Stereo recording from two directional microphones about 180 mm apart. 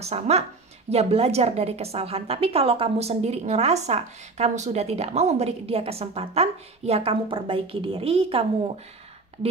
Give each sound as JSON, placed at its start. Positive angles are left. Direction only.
{"t": 0.0, "sound": "a woman's voice", "side_deg": -35}